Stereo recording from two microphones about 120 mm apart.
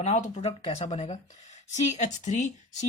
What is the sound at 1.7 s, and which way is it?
Speech, 75° left (ahead or behind).